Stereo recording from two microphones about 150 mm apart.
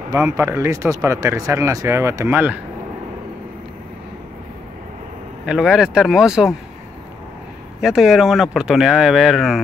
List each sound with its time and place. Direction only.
0.1 s speech: 20° right (ahead or behind)
5.5 s speech: 5° right (ahead or behind)
7.8 s speech: 5° right (ahead or behind)